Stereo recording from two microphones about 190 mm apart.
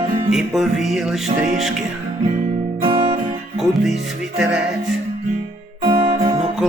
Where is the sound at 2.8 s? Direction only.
25° right (ahead or behind).